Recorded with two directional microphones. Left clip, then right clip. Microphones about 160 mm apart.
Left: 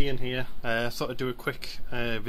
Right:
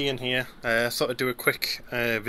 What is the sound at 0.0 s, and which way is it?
Speech, 5° right (ahead or behind).